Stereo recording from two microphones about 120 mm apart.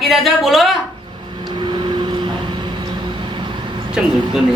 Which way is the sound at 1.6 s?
40° right (ahead or behind).